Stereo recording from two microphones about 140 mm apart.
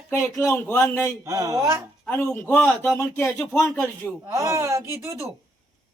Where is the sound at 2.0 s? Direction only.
15° left (ahead or behind).